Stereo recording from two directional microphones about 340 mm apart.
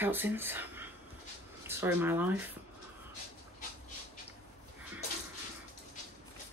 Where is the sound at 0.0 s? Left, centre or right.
Centre.